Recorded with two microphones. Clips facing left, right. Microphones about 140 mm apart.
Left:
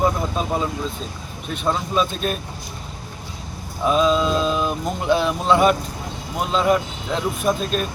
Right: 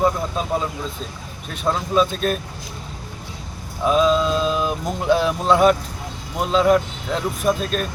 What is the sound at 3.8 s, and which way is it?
Speech, centre (ahead or behind).